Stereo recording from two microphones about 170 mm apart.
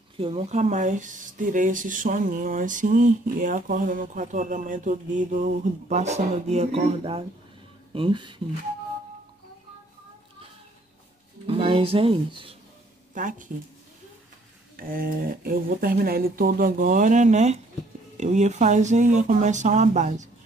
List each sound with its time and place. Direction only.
0.2 s speech: 35° right (ahead or behind)
11.4 s speech: 35° right (ahead or behind)
13.1 s speech: 50° right (ahead or behind)
14.8 s speech: 55° right (ahead or behind)